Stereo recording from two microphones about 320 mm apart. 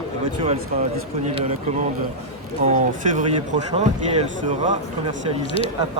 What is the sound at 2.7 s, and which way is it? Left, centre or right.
Speech, right.